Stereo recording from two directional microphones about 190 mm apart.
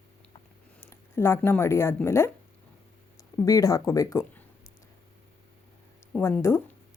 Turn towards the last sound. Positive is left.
turn(degrees=15)  # may be behind; listen again after turning